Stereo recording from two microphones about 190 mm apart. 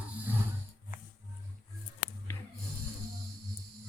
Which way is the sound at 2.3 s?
10° left (ahead or behind).